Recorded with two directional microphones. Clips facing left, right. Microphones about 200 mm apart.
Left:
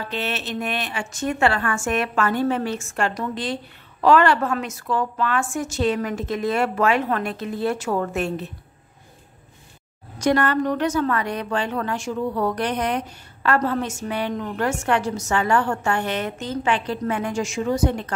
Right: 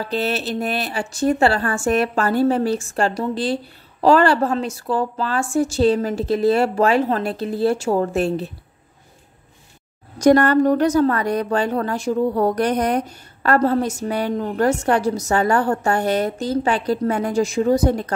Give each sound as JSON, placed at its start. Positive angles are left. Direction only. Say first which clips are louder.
{"t": 0.0, "sound": "a woman's voice", "louder": "right 6 dB", "side_deg": -35}
{"t": 10.1, "sound": "a woman's voice", "louder": "right 6 dB", "side_deg": -40}